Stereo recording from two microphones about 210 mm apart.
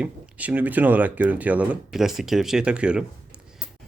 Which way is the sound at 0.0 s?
5° right (ahead or behind).